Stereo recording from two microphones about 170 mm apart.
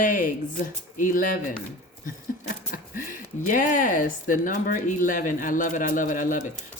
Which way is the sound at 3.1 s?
50° left (ahead or behind).